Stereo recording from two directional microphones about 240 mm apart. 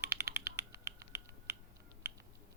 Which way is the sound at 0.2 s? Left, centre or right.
Centre.